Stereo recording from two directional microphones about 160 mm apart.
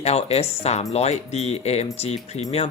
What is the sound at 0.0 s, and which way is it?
Speech, 40° left (ahead or behind).